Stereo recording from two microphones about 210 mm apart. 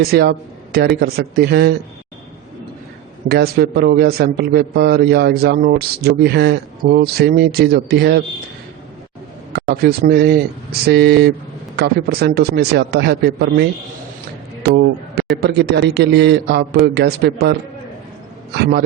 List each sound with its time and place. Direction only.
0.1 s a man's voice: 50° right (ahead or behind)
3.2 s a man's voice: 50° right (ahead or behind)
9.6 s a man's voice: 50° right (ahead or behind)